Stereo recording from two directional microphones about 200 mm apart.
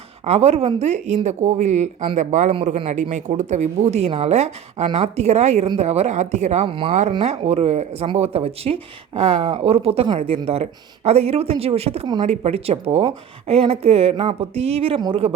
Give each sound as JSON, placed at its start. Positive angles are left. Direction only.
{"t": 0.3, "sound": "speech", "side_deg": -30}